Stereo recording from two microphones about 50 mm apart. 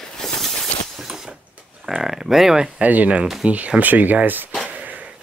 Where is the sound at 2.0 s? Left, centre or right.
Centre.